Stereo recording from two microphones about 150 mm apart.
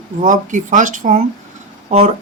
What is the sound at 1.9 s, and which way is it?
Speech, 45° right (ahead or behind).